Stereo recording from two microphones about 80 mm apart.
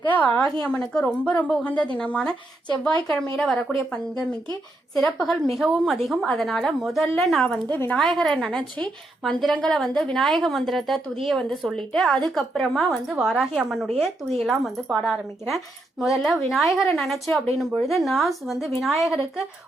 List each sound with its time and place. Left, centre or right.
0.1 s speech: centre
4.9 s a woman's voice: centre
7.4 s speech: centre
7.9 s a woman's voice: centre